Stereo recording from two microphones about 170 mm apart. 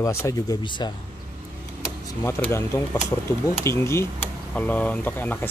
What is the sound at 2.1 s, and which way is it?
Speech, 20° left (ahead or behind).